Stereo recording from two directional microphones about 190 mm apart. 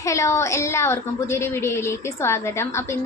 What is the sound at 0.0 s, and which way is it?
A woman's voice, 15° left (ahead or behind).